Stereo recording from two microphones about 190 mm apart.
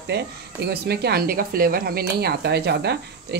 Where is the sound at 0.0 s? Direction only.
60° right (ahead or behind).